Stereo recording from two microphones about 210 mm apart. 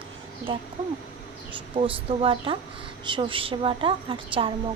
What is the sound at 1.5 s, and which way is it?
Speech, 25° right (ahead or behind).